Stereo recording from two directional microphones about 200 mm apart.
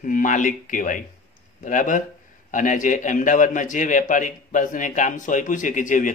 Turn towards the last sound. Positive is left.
turn(degrees=40)  # may be behind; listen again after turning